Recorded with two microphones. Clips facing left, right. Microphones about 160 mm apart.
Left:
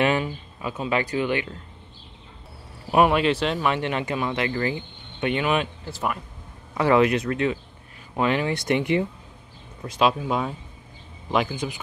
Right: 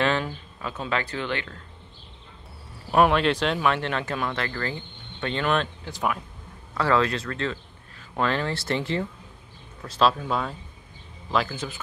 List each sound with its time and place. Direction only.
0.6 s speech: 10° left (ahead or behind)
2.9 s speech: 5° left (ahead or behind)
6.7 s speech: 20° left (ahead or behind)